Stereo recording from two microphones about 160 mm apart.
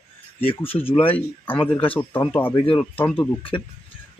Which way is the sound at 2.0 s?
10° left (ahead or behind).